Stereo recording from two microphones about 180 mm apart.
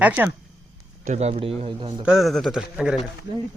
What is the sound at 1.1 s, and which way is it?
Speech, 35° right (ahead or behind).